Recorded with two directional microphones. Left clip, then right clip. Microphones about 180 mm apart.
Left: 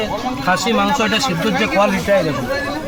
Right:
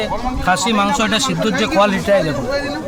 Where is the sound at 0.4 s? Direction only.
20° right (ahead or behind).